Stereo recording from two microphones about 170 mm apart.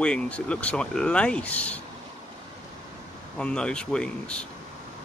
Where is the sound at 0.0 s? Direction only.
5° left (ahead or behind).